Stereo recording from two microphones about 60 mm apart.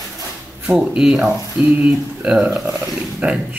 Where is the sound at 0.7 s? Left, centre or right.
Centre.